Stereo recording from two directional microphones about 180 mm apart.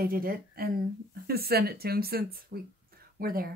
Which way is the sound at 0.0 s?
55° right (ahead or behind).